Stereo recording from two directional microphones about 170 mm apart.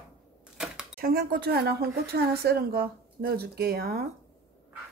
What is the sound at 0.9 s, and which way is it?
A woman's voice, 65° right (ahead or behind).